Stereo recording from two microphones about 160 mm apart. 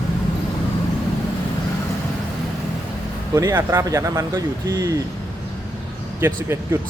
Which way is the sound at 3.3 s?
20° right (ahead or behind).